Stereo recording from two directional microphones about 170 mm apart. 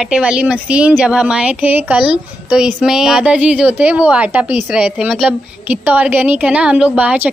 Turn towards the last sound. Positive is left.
turn(degrees=-10)  # may be behind; listen again after turning